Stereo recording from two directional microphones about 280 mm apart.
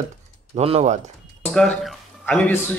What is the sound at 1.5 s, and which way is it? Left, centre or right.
Speech, centre.